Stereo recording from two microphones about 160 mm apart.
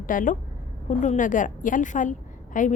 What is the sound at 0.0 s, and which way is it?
A woman's voice, 55° left (ahead or behind).